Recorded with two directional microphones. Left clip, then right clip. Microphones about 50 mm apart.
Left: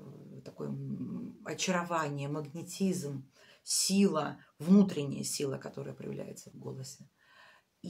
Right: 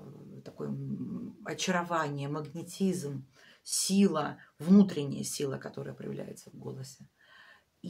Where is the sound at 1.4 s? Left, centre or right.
Right.